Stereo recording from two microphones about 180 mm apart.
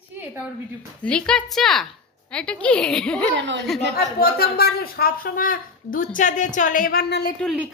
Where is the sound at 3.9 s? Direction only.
60° left (ahead or behind).